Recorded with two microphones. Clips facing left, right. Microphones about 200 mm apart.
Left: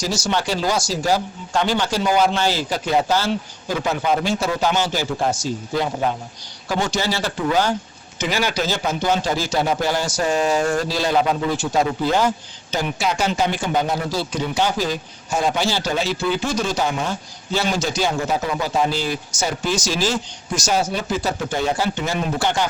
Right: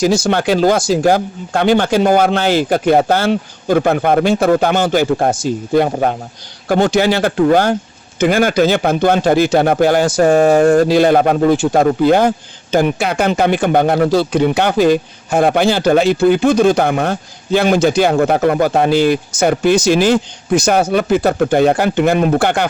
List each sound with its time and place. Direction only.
0.0 s speech: 55° right (ahead or behind)